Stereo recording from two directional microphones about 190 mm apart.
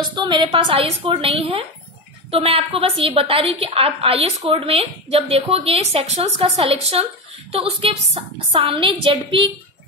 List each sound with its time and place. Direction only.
0.0 s a woman's voice: 25° right (ahead or behind)